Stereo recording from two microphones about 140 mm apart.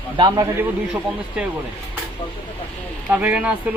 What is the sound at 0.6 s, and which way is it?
Speech, 10° right (ahead or behind).